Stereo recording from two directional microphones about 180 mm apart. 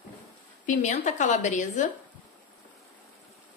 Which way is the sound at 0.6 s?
45° left (ahead or behind).